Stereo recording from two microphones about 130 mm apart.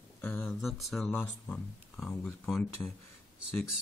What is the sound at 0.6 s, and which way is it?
Speech, centre (ahead or behind).